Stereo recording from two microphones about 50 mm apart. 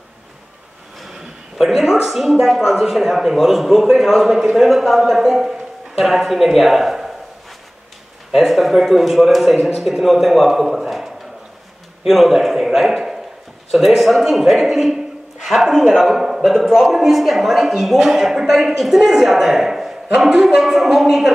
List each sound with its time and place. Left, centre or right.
1.6 s a man's voice: centre
8.3 s a man's voice: centre
12.1 s a man's voice: centre